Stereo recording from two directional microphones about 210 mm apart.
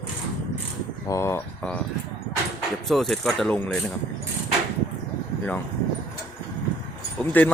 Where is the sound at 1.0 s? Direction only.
15° left (ahead or behind).